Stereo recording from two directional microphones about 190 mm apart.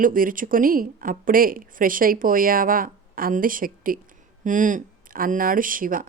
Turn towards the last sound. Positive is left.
turn(degrees=-45)  # may be behind; listen again after turning